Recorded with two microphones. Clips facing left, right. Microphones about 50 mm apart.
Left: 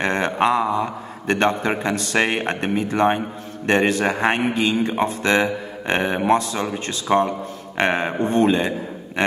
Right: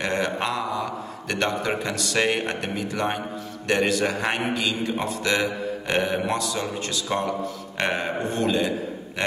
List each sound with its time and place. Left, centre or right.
0.0 s a man's voice: left